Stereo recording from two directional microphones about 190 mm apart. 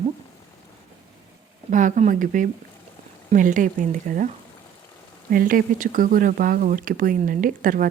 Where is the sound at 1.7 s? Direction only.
40° right (ahead or behind).